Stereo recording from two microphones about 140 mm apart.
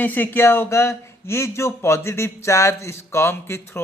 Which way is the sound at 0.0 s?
15° left (ahead or behind).